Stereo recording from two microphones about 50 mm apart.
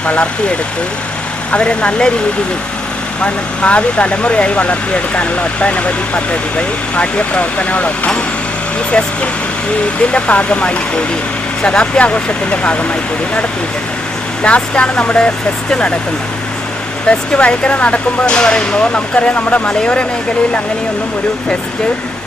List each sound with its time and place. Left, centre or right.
0.0 s speech: left
1.5 s speech: left
3.2 s speech: left
14.4 s speech: left
17.1 s speech: left